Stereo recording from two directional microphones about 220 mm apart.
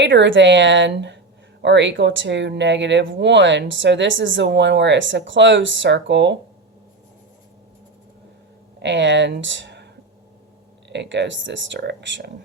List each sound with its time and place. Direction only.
0.0 s speech: 55° right (ahead or behind)
8.8 s speech: 55° right (ahead or behind)